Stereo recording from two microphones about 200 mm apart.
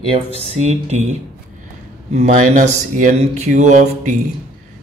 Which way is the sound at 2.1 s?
35° right (ahead or behind).